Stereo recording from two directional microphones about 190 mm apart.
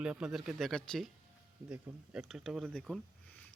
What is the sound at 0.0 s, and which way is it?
Speech, 5° right (ahead or behind).